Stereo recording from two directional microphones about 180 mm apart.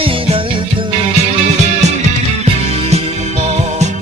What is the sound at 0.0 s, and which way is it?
Music, 30° right (ahead or behind).